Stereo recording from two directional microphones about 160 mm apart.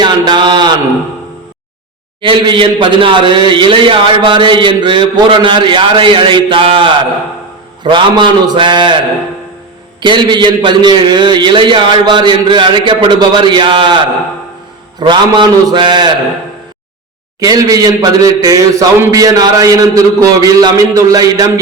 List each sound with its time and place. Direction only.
0.0 s a sound: 25° right (ahead or behind)
2.2 s a man's voice: 30° right (ahead or behind)
10.0 s a man's voice: 30° right (ahead or behind)
17.4 s a man's voice: 25° right (ahead or behind)